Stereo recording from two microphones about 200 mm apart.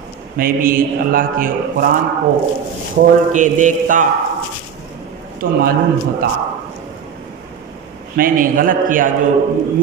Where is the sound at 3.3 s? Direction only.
40° right (ahead or behind).